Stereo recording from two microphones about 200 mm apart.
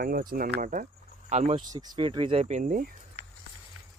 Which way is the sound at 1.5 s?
20° right (ahead or behind).